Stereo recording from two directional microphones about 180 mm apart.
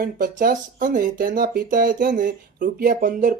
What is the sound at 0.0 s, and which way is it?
Speech, 55° right (ahead or behind).